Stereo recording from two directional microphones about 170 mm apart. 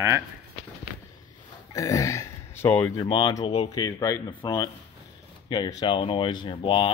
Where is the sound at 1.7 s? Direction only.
20° left (ahead or behind).